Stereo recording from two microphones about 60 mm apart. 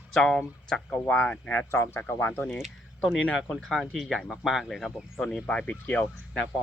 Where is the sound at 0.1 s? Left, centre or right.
Centre.